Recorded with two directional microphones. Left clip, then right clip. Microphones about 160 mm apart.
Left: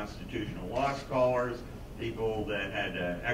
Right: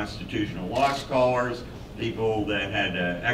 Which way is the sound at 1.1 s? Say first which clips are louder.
Right 3 dB; 45° right (ahead or behind).